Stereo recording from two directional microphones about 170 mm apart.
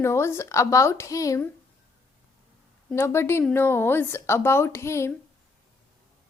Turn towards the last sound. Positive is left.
turn(degrees=15)  # may be behind; listen again after turning